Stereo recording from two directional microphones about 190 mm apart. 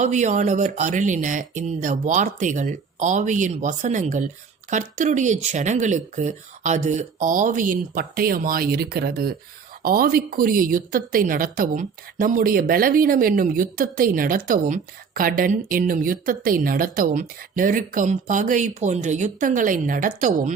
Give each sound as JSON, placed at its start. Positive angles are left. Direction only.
{"t": 0.0, "sound": "speech", "side_deg": -40}